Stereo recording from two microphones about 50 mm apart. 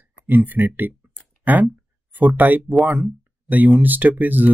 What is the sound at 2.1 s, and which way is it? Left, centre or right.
Speech, right.